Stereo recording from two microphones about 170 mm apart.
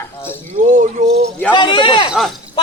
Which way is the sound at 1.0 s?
40° right (ahead or behind).